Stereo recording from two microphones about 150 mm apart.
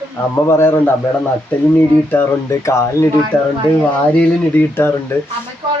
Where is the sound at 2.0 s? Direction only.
15° left (ahead or behind).